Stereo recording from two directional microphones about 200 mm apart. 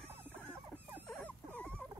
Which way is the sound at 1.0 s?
5° left (ahead or behind).